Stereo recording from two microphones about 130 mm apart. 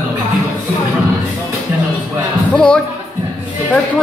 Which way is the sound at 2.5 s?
5° left (ahead or behind).